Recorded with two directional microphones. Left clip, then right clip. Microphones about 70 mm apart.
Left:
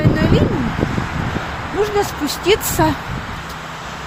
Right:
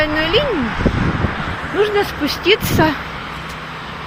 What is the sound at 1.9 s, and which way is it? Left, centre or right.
Speech, left.